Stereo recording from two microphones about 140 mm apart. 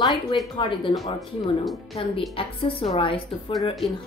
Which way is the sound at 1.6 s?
Centre (ahead or behind).